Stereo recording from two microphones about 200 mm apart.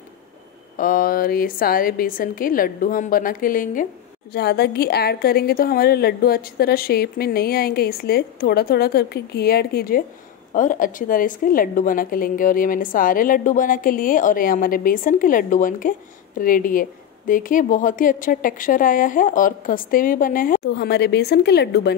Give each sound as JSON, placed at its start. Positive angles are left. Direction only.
{"t": 0.7, "sound": "a woman's voice", "side_deg": 45}
{"t": 4.3, "sound": "a woman's voice", "side_deg": 55}